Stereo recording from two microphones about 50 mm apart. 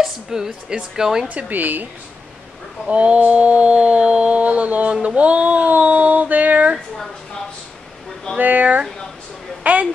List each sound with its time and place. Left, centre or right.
0.0 s a woman's voice: centre
1.3 s speech: right
2.9 s mantra: right
4.9 s a sound: right
8.4 s speech: right
9.6 s a sound: right